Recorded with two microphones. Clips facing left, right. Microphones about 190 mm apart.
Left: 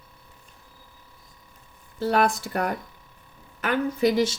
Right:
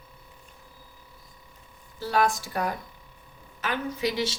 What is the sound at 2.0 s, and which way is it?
Speech, 60° left (ahead or behind).